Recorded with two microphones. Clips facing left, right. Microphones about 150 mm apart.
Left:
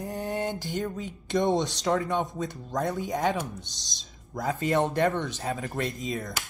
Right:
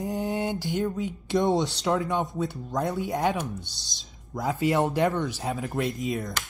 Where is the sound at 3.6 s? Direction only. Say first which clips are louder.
Right 1 dB; 20° left (ahead or behind).